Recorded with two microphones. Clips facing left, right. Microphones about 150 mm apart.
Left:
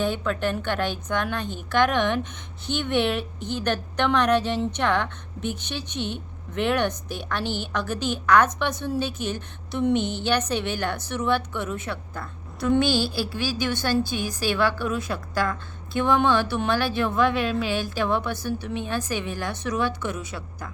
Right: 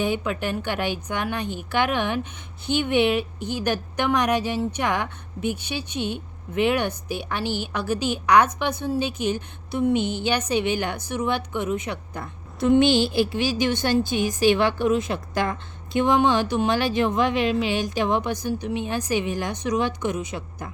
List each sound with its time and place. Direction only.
0.0 s a woman's voice: 10° right (ahead or behind)